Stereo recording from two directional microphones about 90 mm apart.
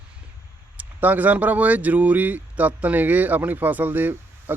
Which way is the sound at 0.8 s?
15° right (ahead or behind).